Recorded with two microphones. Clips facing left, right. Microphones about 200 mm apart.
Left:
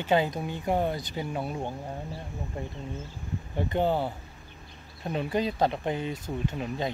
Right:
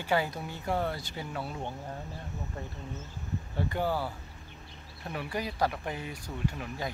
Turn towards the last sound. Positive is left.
turn(degrees=20)  # may be behind; listen again after turning